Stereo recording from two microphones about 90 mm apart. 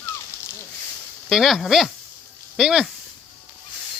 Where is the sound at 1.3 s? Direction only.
Centre (ahead or behind).